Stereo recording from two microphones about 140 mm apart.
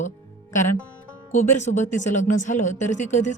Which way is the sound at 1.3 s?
60° left (ahead or behind).